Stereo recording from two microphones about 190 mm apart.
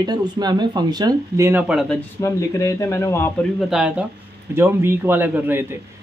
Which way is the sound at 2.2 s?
15° left (ahead or behind).